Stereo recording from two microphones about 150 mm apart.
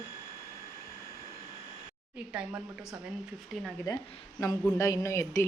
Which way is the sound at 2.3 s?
10° right (ahead or behind).